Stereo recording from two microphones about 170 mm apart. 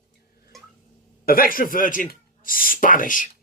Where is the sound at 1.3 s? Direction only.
60° left (ahead or behind).